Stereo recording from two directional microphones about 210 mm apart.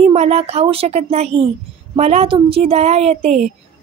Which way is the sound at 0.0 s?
30° right (ahead or behind).